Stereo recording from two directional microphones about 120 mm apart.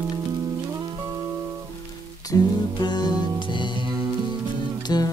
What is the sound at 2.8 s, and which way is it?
Music, 35° left (ahead or behind).